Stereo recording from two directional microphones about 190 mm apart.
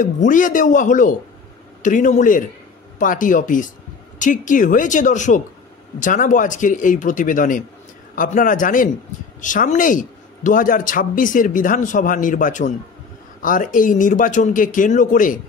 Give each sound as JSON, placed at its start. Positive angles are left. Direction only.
{"t": 0.0, "sound": "speech", "side_deg": 45}